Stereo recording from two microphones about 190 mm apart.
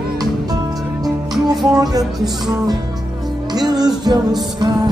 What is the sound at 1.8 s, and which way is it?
Speech, 20° right (ahead or behind).